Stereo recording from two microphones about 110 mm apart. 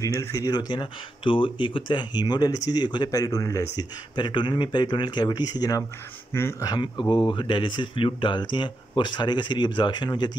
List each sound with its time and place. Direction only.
0.0 s speech: 30° left (ahead or behind)
4.1 s speech: 45° left (ahead or behind)